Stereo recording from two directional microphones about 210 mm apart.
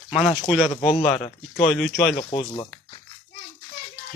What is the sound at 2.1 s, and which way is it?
Speech, 25° left (ahead or behind).